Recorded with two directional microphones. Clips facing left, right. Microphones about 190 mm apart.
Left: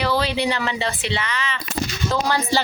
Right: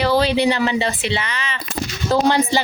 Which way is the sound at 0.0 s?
30° right (ahead or behind).